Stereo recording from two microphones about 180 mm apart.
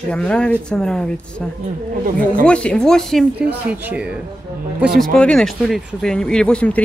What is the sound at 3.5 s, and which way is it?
Speech, 10° right (ahead or behind).